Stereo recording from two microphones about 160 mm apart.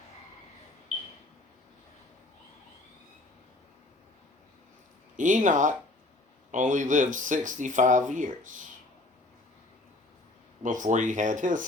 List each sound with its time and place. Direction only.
5.1 s speech: 55° right (ahead or behind)
10.6 s speech: 55° right (ahead or behind)